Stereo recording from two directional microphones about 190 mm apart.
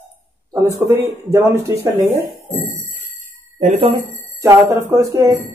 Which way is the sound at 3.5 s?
30° right (ahead or behind).